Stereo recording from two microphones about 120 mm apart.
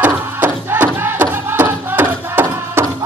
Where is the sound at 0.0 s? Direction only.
15° right (ahead or behind).